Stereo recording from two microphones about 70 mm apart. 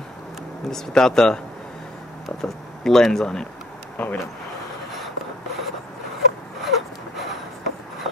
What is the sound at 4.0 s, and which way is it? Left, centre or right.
Speech, left.